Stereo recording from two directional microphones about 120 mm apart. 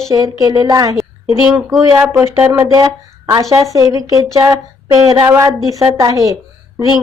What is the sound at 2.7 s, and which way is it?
Speech, 30° right (ahead or behind).